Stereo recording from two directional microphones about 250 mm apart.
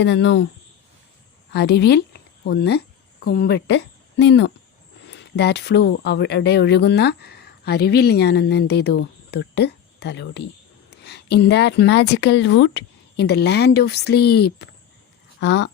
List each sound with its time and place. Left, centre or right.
0.0 s speech: left
1.5 s a woman's voice: left